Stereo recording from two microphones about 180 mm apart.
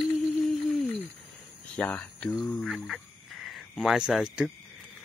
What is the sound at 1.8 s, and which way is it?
Speech, 5° left (ahead or behind).